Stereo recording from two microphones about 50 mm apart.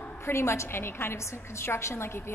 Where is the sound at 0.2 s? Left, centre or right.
Left.